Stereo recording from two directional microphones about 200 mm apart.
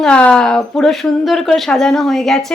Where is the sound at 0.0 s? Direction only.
5° left (ahead or behind).